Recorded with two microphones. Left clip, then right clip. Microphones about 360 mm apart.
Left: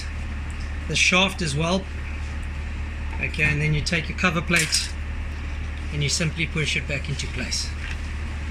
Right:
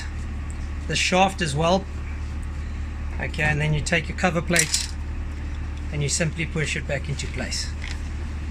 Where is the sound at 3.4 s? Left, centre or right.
Right.